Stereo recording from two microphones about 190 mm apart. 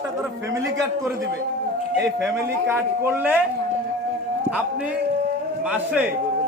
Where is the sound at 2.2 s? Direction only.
10° right (ahead or behind).